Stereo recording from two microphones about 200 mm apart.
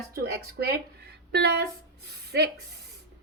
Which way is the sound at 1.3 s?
55° right (ahead or behind).